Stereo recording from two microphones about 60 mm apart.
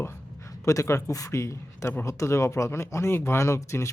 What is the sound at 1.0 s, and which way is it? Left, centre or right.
Speech, left.